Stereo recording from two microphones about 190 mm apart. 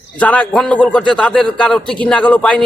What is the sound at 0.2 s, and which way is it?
A man's voice, 5° left (ahead or behind).